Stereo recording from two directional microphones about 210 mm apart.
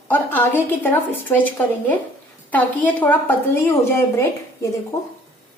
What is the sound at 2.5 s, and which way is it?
A woman's voice, 10° left (ahead or behind).